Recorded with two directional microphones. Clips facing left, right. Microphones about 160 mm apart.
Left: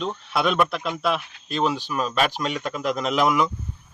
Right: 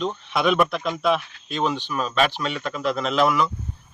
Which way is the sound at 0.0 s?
5° left (ahead or behind).